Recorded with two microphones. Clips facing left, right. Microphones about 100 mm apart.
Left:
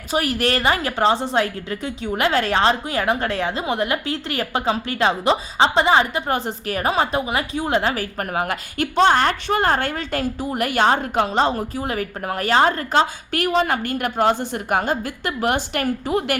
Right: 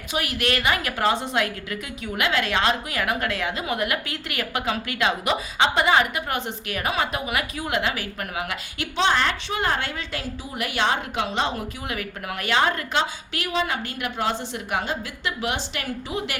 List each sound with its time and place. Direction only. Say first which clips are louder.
0.1 s a woman's voice: left 5 dB; 35° left (ahead or behind)